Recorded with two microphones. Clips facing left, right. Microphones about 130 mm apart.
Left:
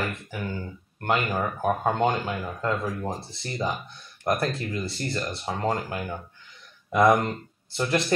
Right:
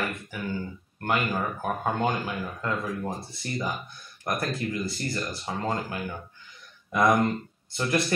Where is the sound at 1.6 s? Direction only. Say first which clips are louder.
Left 5 dB; 25° left (ahead or behind).